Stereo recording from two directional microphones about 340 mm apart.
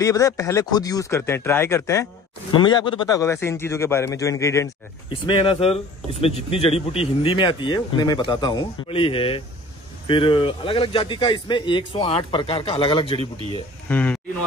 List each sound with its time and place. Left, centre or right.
0.0 s speech: centre
13.2 s speech: centre
13.8 s speech: centre